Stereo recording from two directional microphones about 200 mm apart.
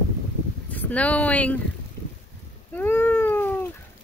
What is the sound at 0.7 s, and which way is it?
Speech, 10° left (ahead or behind).